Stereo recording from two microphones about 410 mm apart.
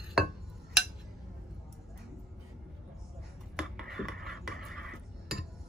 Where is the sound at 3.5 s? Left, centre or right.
Centre.